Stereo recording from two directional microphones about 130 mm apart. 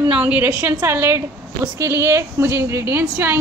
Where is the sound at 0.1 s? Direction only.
10° right (ahead or behind).